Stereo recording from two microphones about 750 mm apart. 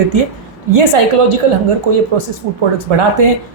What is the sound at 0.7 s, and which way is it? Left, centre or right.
A woman's voice, right.